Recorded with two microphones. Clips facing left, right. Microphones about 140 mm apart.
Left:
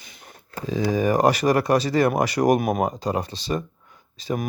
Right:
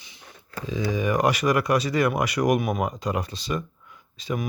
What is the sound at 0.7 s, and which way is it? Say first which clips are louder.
Speech: left 4 dB; 40° left (ahead or behind).